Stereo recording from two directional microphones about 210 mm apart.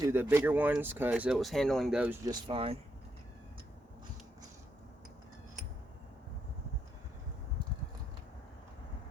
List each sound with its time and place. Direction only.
0.0 s speech: 10° right (ahead or behind)
2.2 s speech: 25° right (ahead or behind)